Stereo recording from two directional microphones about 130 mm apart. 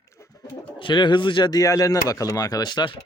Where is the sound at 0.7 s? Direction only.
40° left (ahead or behind).